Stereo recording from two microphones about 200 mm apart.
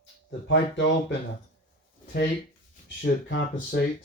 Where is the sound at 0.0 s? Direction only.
70° left (ahead or behind).